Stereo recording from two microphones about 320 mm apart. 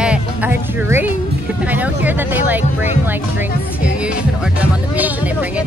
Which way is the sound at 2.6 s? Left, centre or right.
Left.